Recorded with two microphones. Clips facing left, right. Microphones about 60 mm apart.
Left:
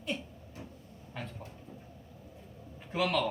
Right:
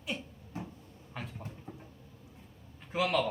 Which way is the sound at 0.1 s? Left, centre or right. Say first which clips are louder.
Right 1 dB; centre.